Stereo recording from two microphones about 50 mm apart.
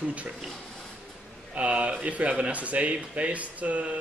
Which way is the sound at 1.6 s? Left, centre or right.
Centre.